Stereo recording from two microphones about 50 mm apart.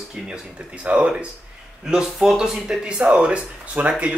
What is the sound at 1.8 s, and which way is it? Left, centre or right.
Speech, centre.